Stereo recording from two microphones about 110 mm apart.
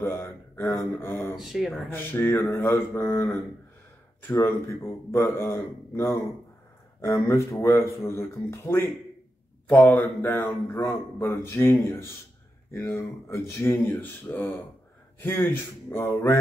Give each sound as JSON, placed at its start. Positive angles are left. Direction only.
{"t": 0.0, "sound": "a sound", "side_deg": 20}
{"t": 0.9, "sound": "speech", "side_deg": 20}
{"t": 1.3, "sound": "speech", "side_deg": -5}
{"t": 1.9, "sound": "speech", "side_deg": 20}
{"t": 12.8, "sound": "speech", "side_deg": 25}